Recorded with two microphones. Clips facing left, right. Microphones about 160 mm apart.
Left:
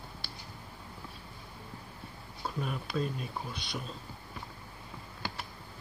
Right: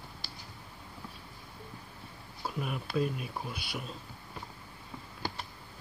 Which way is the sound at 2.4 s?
5° right (ahead or behind).